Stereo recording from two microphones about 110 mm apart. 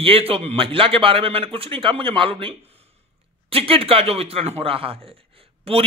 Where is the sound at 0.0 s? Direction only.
60° right (ahead or behind).